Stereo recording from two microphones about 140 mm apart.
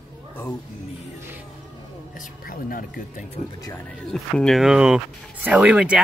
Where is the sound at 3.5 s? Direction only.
25° left (ahead or behind).